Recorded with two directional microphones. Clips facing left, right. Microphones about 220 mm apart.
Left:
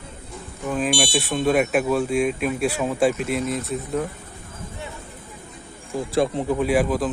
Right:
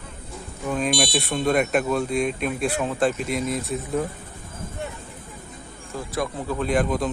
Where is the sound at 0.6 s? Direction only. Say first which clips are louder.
Left 1 dB; 5° left (ahead or behind).